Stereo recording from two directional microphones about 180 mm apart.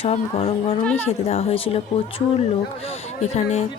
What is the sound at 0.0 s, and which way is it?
Speech, 30° left (ahead or behind).